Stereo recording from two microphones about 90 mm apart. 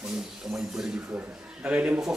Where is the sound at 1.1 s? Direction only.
15° right (ahead or behind).